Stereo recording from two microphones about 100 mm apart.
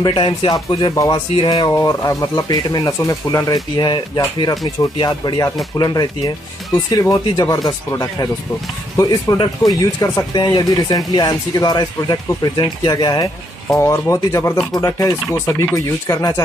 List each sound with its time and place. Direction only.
0.0 s speech: 65° left (ahead or behind)
0.9 s speech: 35° left (ahead or behind)
1.3 s speech: 65° left (ahead or behind)
1.7 s speech: 35° left (ahead or behind)
3.7 s speech: 50° left (ahead or behind)
13.7 s speech: 25° left (ahead or behind)